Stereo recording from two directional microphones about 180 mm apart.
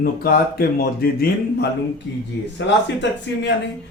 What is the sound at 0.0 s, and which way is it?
Speech, 55° left (ahead or behind).